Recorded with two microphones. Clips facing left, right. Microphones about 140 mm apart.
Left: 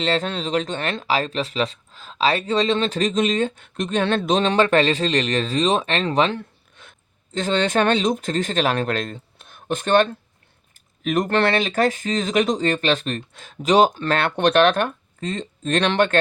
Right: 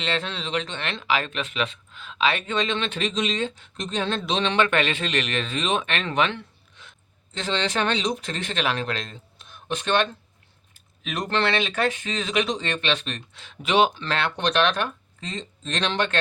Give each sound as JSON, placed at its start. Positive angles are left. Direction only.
{"t": 0.0, "sound": "speech", "side_deg": 40}
{"t": 6.8, "sound": "a sound", "side_deg": 50}
{"t": 7.3, "sound": "speech", "side_deg": 45}